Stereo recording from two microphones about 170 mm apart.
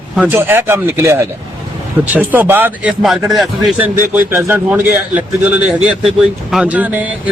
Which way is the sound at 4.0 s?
15° right (ahead or behind).